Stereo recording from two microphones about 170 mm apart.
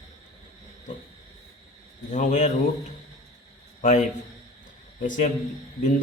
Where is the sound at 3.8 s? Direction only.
45° left (ahead or behind).